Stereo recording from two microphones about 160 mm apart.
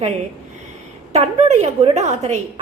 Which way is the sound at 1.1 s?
40° right (ahead or behind).